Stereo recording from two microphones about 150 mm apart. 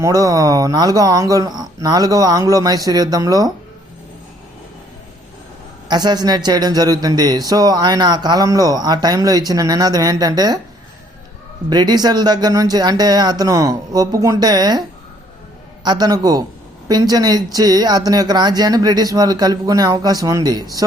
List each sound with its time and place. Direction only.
0.0 s speech: 25° right (ahead or behind)
5.9 s speech: 30° right (ahead or behind)
11.7 s speech: 30° right (ahead or behind)